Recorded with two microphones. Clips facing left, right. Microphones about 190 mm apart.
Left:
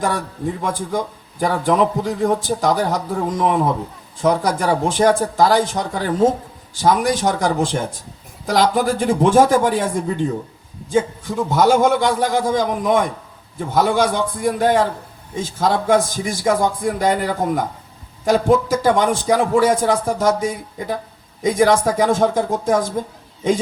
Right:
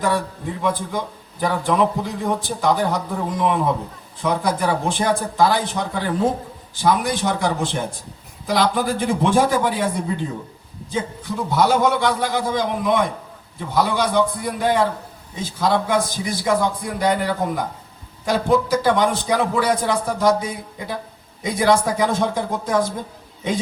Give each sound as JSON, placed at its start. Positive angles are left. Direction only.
{"t": 0.6, "sound": "a man's voice", "side_deg": 45}